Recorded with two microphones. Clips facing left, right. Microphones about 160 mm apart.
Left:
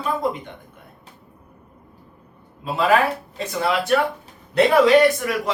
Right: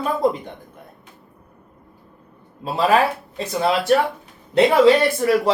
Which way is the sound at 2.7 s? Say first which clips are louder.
Right 1 dB; 30° right (ahead or behind).